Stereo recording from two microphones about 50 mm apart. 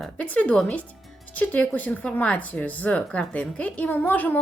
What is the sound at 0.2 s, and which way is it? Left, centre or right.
Speech, left.